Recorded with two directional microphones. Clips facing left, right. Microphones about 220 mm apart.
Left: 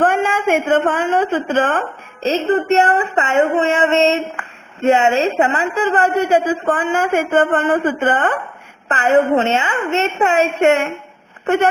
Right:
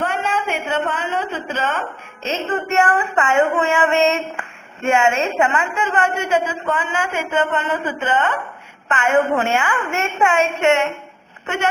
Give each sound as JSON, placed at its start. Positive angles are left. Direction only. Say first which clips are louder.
{"t": 0.0, "sound": "a woman's voice", "louder": "left 6 dB", "side_deg": 50}
{"t": 2.2, "sound": "a woman's voice", "louder": "left 7 dB", "side_deg": 35}
{"t": 2.8, "sound": "child singing", "louder": "left 2 dB", "side_deg": 20}
{"t": 5.4, "sound": "a woman's voice", "louder": "left 3 dB", "side_deg": 35}
{"t": 6.7, "sound": "a woman's voice", "louder": "left 6 dB", "side_deg": 50}
{"t": 8.9, "sound": "a woman's voice", "louder": "left 3 dB", "side_deg": 35}
{"t": 9.3, "sound": "child singing", "louder": "left 3 dB", "side_deg": 20}
{"t": 10.2, "sound": "a woman's voice", "louder": "left 1 dB", "side_deg": 35}
{"t": 11.4, "sound": "a woman's voice", "louder": "left 7 dB", "side_deg": 55}